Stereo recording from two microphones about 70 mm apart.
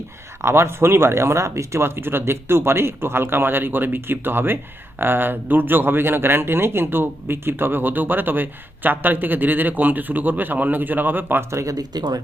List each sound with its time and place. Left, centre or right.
0.4 s speech: right
11.5 s speech: right